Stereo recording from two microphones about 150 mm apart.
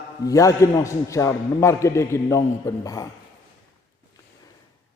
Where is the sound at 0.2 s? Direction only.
20° left (ahead or behind).